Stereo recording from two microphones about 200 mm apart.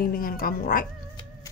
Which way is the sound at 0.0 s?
45° left (ahead or behind).